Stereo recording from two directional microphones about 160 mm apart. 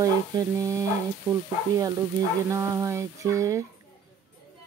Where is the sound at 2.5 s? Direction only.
15° right (ahead or behind).